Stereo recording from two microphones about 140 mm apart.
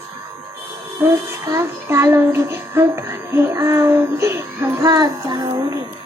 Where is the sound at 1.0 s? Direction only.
20° right (ahead or behind).